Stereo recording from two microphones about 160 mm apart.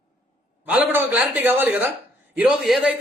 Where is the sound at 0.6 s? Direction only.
10° right (ahead or behind).